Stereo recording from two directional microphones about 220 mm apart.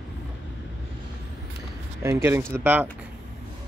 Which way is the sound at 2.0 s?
10° right (ahead or behind).